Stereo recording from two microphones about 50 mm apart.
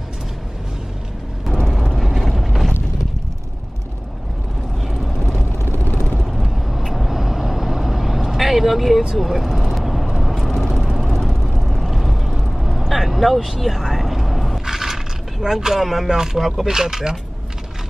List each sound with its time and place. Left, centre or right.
1.9 s mechanisms: centre
4.8 s vehicle: centre
6.3 s vehicle: centre
14.6 s scrape: centre
15.4 s speech: centre
15.8 s music: centre
16.1 s speech: centre